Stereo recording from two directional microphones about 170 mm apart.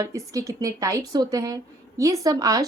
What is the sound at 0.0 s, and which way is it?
A woman's voice, 20° right (ahead or behind).